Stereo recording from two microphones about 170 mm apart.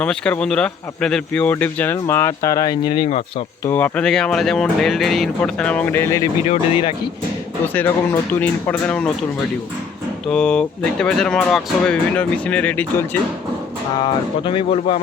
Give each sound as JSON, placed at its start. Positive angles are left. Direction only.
{"t": 0.0, "sound": "speech", "side_deg": 5}
{"t": 3.7, "sound": "speech", "side_deg": 10}
{"t": 6.5, "sound": "speech", "side_deg": 35}
{"t": 7.7, "sound": "speech", "side_deg": 10}
{"t": 10.2, "sound": "speech", "side_deg": 5}
{"t": 14.0, "sound": "speech", "side_deg": 30}